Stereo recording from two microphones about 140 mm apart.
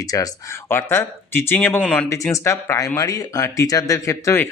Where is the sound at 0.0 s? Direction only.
25° left (ahead or behind).